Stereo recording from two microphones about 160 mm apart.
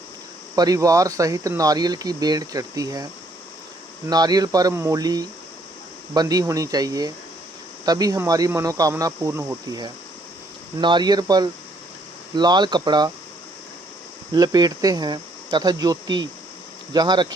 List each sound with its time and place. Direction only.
0.5 s speech: 25° right (ahead or behind)
4.1 s speech: 25° right (ahead or behind)
14.3 s speech: 25° right (ahead or behind)